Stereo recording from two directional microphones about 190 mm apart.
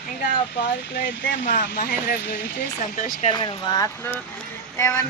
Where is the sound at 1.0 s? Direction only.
75° left (ahead or behind).